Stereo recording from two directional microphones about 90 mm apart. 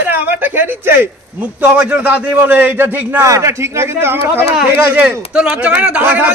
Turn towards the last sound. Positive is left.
turn(degrees=-20)  # may be behind; listen again after turning